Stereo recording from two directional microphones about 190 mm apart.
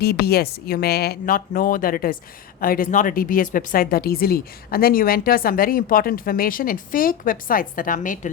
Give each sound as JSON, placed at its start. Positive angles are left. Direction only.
{"t": 0.0, "sound": "speech", "side_deg": 55}